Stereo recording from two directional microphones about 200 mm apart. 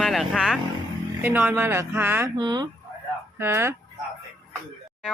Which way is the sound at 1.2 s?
10° right (ahead or behind).